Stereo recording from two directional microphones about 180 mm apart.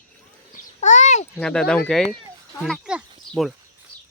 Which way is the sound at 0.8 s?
40° left (ahead or behind).